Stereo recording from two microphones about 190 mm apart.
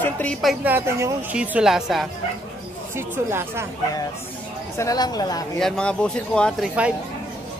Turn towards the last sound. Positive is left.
turn(degrees=-5)  # may be behind; listen again after turning